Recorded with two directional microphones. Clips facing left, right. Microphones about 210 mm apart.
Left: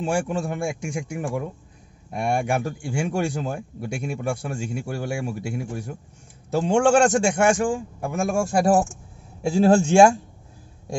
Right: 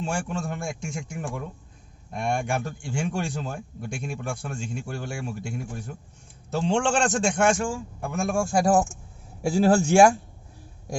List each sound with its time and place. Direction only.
0.0 s a man's voice: 15° left (ahead or behind)
9.6 s speech: 25° left (ahead or behind)